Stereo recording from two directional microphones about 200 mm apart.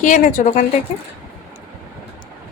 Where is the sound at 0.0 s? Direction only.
40° left (ahead or behind).